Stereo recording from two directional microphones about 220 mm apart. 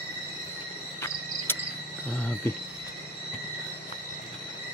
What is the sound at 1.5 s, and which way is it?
Cricket, 10° left (ahead or behind).